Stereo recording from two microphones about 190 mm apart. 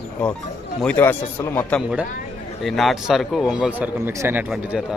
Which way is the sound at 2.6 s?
Centre (ahead or behind).